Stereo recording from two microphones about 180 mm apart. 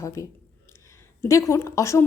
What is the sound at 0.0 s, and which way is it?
A woman's voice, 15° left (ahead or behind).